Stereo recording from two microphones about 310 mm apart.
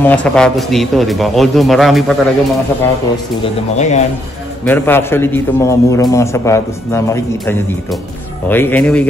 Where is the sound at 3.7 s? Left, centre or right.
Left.